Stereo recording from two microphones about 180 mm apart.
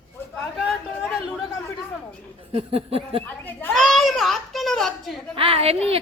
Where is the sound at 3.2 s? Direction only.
10° left (ahead or behind).